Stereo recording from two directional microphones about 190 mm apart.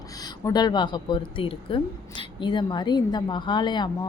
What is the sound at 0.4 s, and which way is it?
A woman's voice, 20° left (ahead or behind).